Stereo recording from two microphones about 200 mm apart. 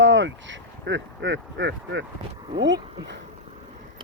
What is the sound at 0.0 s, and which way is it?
Speech, 65° right (ahead or behind).